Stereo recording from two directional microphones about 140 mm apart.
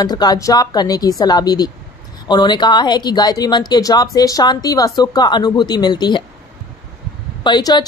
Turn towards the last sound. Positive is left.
turn(degrees=30)  # may be behind; listen again after turning